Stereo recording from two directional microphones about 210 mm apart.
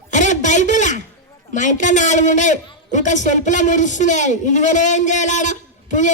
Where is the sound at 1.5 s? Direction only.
35° left (ahead or behind).